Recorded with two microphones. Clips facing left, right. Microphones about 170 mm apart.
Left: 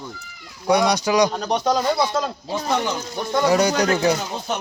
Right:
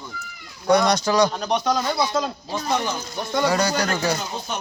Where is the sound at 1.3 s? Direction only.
40° left (ahead or behind).